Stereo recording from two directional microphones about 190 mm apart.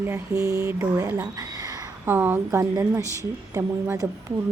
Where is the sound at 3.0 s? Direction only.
15° left (ahead or behind).